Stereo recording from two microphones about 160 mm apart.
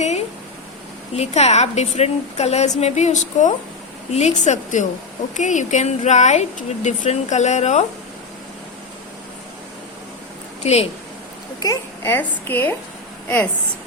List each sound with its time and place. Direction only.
1.1 s speech: 45° left (ahead or behind)
10.6 s a woman's voice: 40° left (ahead or behind)
11.6 s a woman's voice: 15° left (ahead or behind)